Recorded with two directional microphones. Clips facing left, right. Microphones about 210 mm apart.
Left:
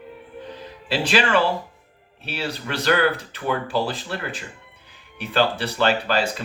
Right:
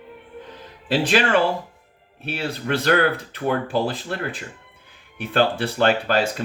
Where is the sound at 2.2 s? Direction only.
50° right (ahead or behind).